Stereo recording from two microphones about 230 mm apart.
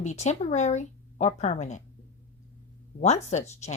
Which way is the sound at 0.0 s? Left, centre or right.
Left.